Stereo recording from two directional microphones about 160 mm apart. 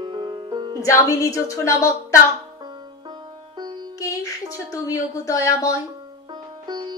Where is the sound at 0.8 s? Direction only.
20° left (ahead or behind).